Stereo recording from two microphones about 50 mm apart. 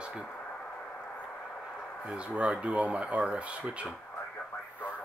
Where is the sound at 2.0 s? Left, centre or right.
Right.